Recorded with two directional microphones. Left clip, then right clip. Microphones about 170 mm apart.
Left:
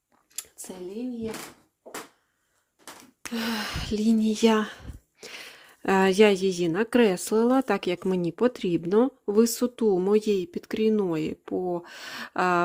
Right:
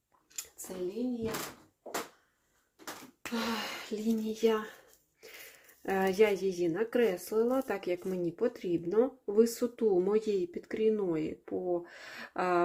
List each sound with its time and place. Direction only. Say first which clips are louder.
3.2 s speech: left 4 dB; 45° left (ahead or behind)